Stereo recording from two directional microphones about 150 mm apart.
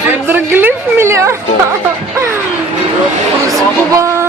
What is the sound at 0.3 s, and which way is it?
A woman's voice, 15° right (ahead or behind).